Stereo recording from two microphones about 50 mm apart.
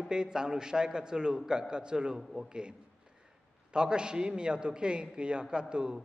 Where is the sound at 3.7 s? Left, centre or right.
Centre.